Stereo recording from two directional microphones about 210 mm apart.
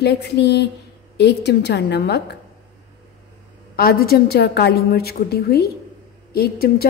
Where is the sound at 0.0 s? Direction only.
50° left (ahead or behind).